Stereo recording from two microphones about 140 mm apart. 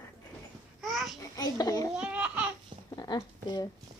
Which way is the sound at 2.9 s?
30° left (ahead or behind).